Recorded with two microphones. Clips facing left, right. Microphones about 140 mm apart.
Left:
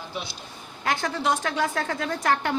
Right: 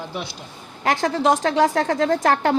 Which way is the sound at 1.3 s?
40° right (ahead or behind).